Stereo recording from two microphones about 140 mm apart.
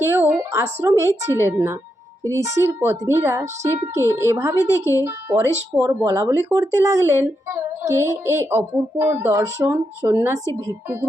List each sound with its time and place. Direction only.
0.0 s speech: 15° right (ahead or behind)